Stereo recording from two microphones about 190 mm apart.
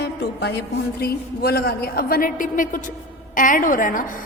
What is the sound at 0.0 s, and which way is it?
A woman's voice, 60° left (ahead or behind).